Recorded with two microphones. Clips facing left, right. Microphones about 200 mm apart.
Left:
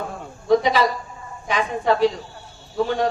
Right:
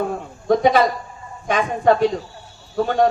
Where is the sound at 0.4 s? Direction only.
50° right (ahead or behind).